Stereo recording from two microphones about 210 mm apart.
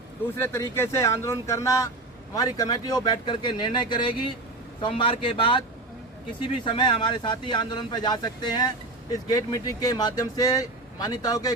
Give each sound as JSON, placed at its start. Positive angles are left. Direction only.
{"t": 0.3, "sound": "speech", "side_deg": 10}
{"t": 6.7, "sound": "speech", "side_deg": 25}